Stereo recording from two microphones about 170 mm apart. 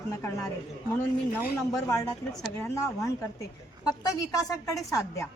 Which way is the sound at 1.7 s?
20° left (ahead or behind).